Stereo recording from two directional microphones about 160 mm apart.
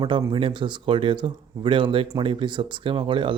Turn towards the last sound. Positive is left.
turn(degrees=-30)  # may be behind; listen again after turning